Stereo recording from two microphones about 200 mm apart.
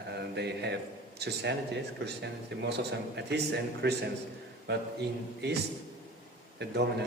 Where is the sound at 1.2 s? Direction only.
55° right (ahead or behind).